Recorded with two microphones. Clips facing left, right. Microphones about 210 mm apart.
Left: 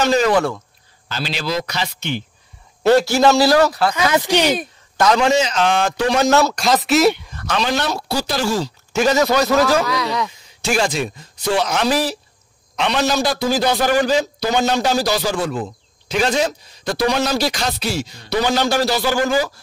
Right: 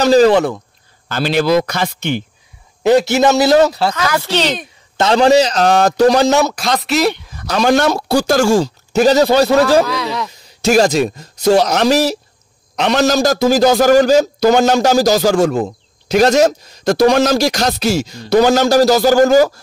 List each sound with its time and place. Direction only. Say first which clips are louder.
0.0 s a man's voice: right 7 dB; 35° right (ahead or behind)
1.0 s speech: right 10 dB; 55° right (ahead or behind)
2.8 s a man's voice: right 2 dB; 15° right (ahead or behind)
4.0 s speech: left 3 dB; 20° left (ahead or behind)
4.9 s a man's voice: right 5 dB; 30° right (ahead or behind)
6.5 s speech: left 1 dB; centre (ahead or behind)
7.4 s a man's voice: right 7 dB; 45° right (ahead or behind)
8.9 s a man's voice: right 5 dB; 35° right (ahead or behind)
9.8 s speech: right 1 dB; centre (ahead or behind)
10.6 s a man's voice: right 8 dB; 40° right (ahead or behind)